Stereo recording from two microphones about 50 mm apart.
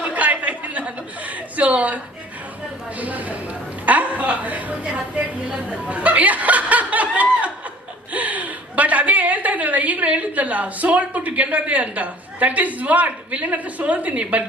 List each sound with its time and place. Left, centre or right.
0.0 s chuckle: right
3.0 s a man's voice: right
5.9 s snicker: right
8.1 s a woman's voice: right